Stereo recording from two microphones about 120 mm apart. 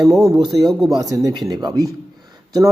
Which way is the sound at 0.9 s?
30° right (ahead or behind).